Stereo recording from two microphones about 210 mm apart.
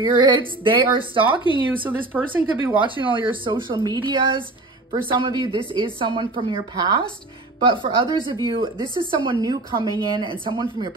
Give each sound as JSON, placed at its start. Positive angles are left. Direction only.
{"t": 0.0, "sound": "a woman's voice", "side_deg": -20}
{"t": 1.9, "sound": "speech", "side_deg": -10}
{"t": 3.0, "sound": "a woman's voice", "side_deg": -25}